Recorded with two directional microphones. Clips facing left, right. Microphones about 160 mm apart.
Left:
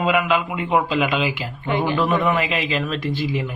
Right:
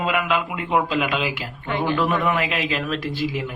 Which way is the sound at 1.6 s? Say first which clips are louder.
Left 2 dB; 15° left (ahead or behind).